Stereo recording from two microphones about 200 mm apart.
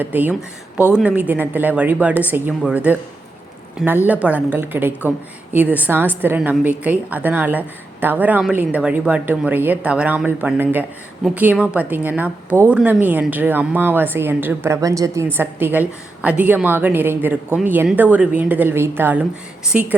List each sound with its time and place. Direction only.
0.0 s speech: 10° right (ahead or behind)